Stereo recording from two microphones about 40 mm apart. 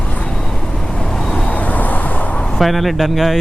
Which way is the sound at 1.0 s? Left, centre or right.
Centre.